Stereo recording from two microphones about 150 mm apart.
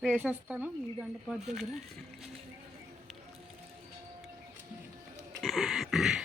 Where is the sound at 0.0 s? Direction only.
5° right (ahead or behind).